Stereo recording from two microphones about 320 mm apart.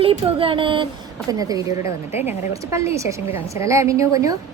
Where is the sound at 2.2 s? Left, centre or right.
Centre.